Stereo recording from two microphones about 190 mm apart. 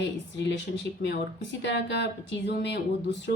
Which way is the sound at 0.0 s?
65° left (ahead or behind).